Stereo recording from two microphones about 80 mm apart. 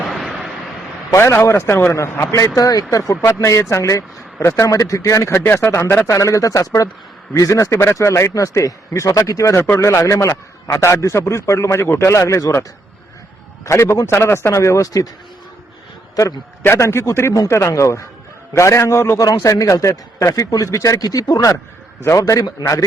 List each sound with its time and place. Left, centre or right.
0.0 s a sound: centre
1.1 s a man's voice: left
2.6 s a man's voice: left
3.1 s a man's voice: left
13.7 s a man's voice: left
16.7 s a man's voice: left